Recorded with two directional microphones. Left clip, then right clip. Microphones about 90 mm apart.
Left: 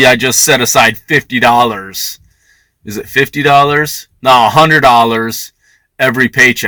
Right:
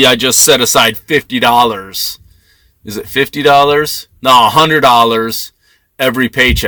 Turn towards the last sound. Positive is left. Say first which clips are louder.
# left 3 dB
turn(degrees=-35)  # may be behind; listen again after turning